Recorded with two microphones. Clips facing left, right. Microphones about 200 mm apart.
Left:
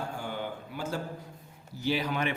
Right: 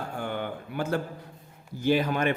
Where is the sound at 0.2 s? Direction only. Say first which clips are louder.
Right 4 dB; 60° right (ahead or behind).